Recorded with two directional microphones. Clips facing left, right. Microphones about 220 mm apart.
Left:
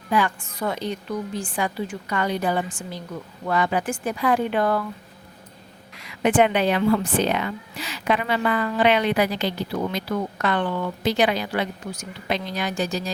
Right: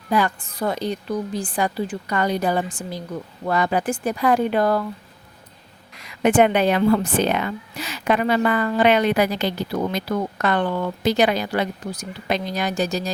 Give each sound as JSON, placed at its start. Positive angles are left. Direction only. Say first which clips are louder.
{"t": 0.1, "sound": "speech", "louder": "right 2 dB", "side_deg": -35}
{"t": 6.2, "sound": "a woman's voice", "louder": "right 3 dB", "side_deg": -45}